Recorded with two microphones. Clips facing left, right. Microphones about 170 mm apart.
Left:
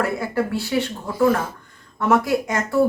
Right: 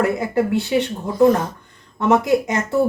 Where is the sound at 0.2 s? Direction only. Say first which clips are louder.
Right 4 dB; 20° right (ahead or behind).